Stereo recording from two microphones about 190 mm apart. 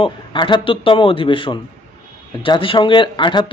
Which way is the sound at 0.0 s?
25° left (ahead or behind).